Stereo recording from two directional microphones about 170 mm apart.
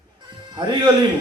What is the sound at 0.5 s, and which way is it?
Music, 25° right (ahead or behind).